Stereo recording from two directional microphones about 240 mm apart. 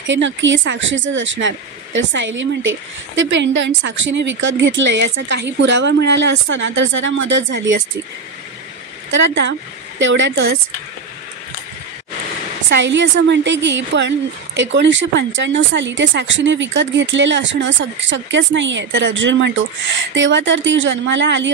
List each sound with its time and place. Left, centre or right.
0.0 s speech: right
9.1 s speech: right
12.6 s speech: right